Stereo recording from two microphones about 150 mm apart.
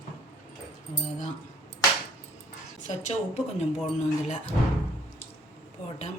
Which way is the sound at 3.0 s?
50° left (ahead or behind).